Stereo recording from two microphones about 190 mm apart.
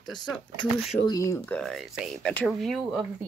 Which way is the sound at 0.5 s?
20° left (ahead or behind).